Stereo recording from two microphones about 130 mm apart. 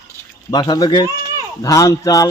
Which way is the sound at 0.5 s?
30° left (ahead or behind).